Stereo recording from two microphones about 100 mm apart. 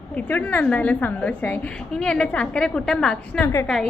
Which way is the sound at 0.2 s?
15° left (ahead or behind).